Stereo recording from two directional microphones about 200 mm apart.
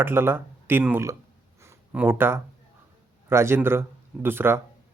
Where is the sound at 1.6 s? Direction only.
10° right (ahead or behind).